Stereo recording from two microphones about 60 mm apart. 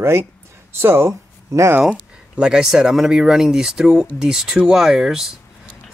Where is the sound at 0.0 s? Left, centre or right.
Right.